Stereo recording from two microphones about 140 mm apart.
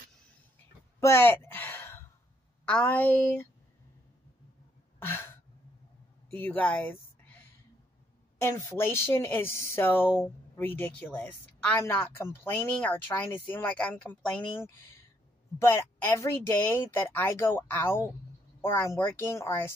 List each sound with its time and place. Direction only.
1.0 s a sound: 15° left (ahead or behind)
2.6 s a woman's voice: 10° left (ahead or behind)
4.9 s a sound: 15° left (ahead or behind)
6.3 s speech: 15° left (ahead or behind)
8.4 s a woman's voice: 20° left (ahead or behind)
15.6 s a woman's voice: 15° left (ahead or behind)